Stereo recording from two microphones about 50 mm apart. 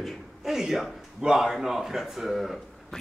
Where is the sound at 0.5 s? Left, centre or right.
Centre.